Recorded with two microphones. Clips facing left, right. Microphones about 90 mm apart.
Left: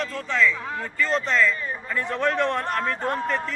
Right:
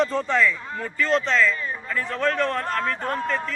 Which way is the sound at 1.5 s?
20° left (ahead or behind).